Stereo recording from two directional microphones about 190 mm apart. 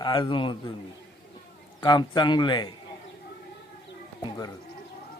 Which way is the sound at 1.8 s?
20° left (ahead or behind).